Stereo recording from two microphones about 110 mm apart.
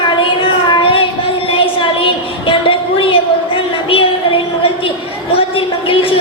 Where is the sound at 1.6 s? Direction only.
50° left (ahead or behind).